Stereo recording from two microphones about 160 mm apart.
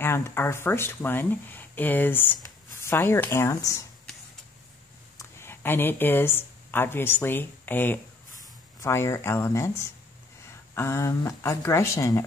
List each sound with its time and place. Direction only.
0.0 s speech: 15° left (ahead or behind)
5.1 s speech: 15° left (ahead or behind)
10.7 s speech: 15° left (ahead or behind)